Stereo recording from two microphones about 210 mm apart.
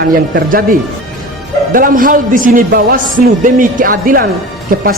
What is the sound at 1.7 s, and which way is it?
A man's voice, 40° right (ahead or behind).